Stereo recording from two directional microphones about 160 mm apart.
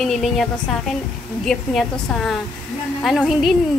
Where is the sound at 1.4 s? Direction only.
5° left (ahead or behind).